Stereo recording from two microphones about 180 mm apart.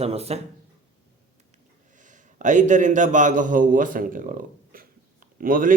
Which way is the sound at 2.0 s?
45° right (ahead or behind).